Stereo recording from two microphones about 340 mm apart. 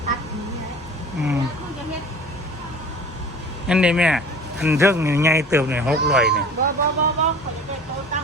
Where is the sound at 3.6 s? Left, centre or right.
Centre.